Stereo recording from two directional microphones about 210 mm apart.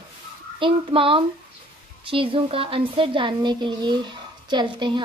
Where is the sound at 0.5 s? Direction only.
25° right (ahead or behind).